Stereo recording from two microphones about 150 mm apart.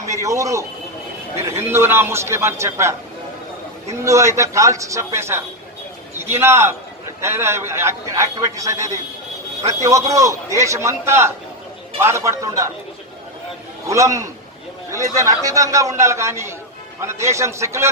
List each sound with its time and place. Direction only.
0.0 s a man's voice: 20° right (ahead or behind)
4.0 s a man's voice: 20° right (ahead or behind)
13.8 s a man's voice: 20° right (ahead or behind)